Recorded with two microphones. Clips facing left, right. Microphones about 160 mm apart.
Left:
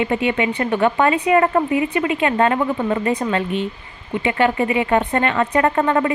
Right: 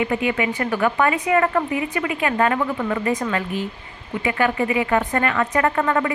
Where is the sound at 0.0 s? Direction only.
25° left (ahead or behind).